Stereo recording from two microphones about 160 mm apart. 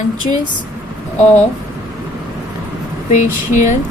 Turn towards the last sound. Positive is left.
turn(degrees=50)  # may be behind; listen again after turning